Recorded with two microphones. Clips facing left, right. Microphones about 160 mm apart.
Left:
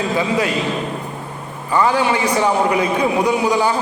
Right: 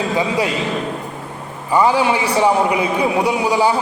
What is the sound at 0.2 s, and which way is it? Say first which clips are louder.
Speech: even; 20° right (ahead or behind).